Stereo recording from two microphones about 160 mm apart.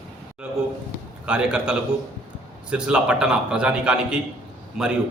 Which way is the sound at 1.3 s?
5° right (ahead or behind).